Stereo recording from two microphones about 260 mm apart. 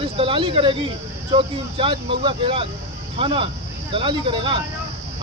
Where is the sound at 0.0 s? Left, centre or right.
Centre.